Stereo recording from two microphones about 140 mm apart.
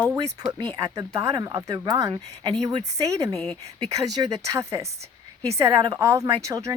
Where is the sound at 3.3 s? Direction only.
15° left (ahead or behind).